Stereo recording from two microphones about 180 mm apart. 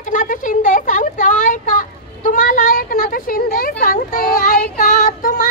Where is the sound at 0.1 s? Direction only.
45° left (ahead or behind).